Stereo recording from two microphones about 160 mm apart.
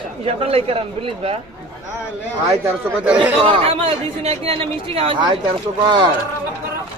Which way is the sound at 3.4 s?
35° right (ahead or behind).